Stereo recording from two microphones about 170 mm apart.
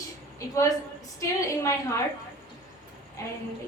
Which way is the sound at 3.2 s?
20° left (ahead or behind).